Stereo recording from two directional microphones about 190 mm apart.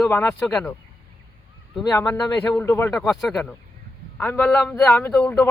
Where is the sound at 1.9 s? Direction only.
20° left (ahead or behind).